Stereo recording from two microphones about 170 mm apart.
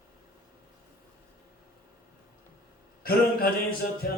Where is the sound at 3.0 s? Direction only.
60° left (ahead or behind).